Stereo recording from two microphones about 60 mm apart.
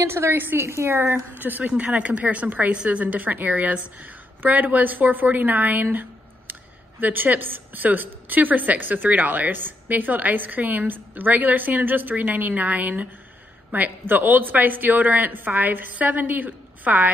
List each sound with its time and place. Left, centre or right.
0.0 s a woman's voice: right